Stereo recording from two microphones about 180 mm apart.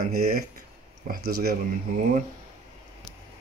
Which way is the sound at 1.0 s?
60° right (ahead or behind).